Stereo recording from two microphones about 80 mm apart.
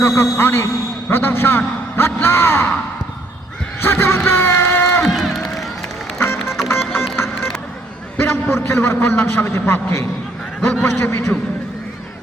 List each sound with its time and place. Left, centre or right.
0.0 s a man's voice: left
3.8 s a sound: left
5.0 s run: centre
6.1 s music: left
8.2 s a man's voice: left